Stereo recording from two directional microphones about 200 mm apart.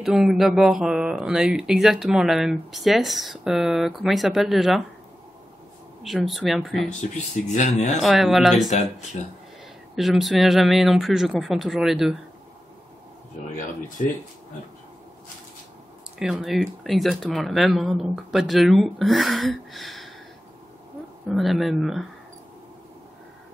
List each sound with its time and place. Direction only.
0.0 s speech: centre (ahead or behind)
6.0 s speech: centre (ahead or behind)
7.0 s speech: 35° left (ahead or behind)
8.0 s speech: centre (ahead or behind)
9.2 s speech: 35° left (ahead or behind)
9.9 s speech: centre (ahead or behind)
16.2 s speech: centre (ahead or behind)
21.3 s speech: centre (ahead or behind)